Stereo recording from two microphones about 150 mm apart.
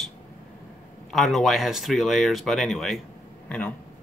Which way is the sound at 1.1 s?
Centre (ahead or behind).